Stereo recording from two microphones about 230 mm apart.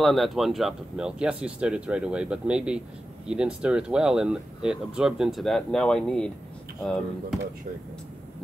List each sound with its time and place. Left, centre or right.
0.0 s speech: centre